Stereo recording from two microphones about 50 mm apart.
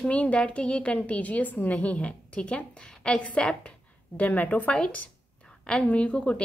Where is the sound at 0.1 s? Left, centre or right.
Left.